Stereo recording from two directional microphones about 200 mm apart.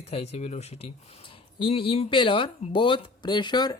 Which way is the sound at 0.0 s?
30° left (ahead or behind).